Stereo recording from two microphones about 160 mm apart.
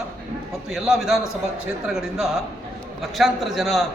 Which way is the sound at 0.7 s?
Centre (ahead or behind).